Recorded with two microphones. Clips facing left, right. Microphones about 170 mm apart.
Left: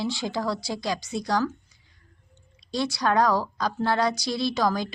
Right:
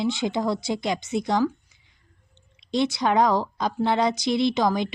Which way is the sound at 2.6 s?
20° right (ahead or behind).